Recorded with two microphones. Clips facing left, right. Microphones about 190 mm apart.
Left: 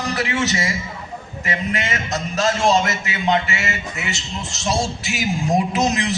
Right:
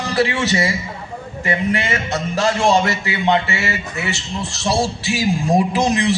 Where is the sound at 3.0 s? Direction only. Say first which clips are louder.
Right 2 dB; 30° right (ahead or behind).